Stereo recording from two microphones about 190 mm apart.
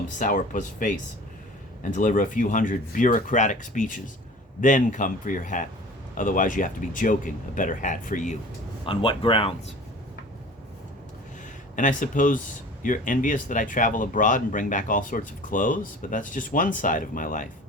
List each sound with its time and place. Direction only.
0.2 s speech: 45° left (ahead or behind)
8.8 s speech: 25° left (ahead or behind)
11.8 s speech: 45° left (ahead or behind)